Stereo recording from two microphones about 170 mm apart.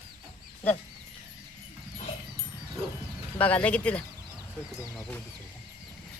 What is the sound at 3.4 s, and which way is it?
A man's voice, 10° left (ahead or behind).